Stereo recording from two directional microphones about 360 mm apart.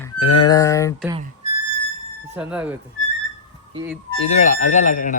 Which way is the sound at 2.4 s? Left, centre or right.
Centre.